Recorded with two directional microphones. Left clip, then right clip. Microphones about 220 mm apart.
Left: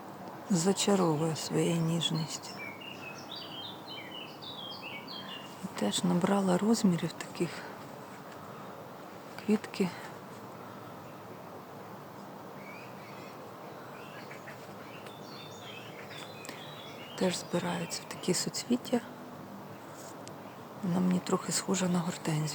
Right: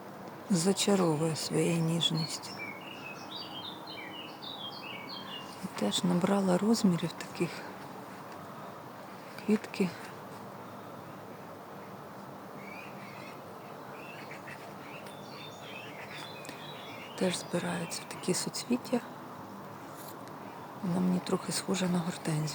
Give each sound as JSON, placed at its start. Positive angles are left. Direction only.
{"t": 0.5, "sound": "speech", "side_deg": 0}
{"t": 5.7, "sound": "speech", "side_deg": 0}
{"t": 9.5, "sound": "speech", "side_deg": 0}
{"t": 17.2, "sound": "speech", "side_deg": 0}
{"t": 20.9, "sound": "speech", "side_deg": 5}